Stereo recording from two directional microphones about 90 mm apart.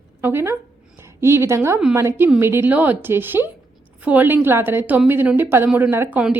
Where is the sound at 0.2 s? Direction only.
25° right (ahead or behind).